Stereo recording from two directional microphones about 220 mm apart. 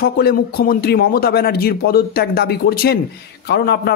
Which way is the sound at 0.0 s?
45° left (ahead or behind).